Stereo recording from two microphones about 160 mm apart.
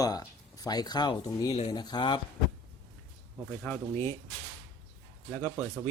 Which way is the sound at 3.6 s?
15° left (ahead or behind).